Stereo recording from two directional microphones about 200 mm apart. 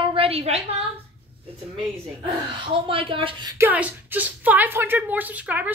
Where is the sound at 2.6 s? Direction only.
25° right (ahead or behind).